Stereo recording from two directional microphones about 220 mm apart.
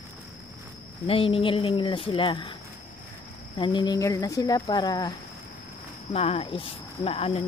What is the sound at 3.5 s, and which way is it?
Speech, 20° left (ahead or behind).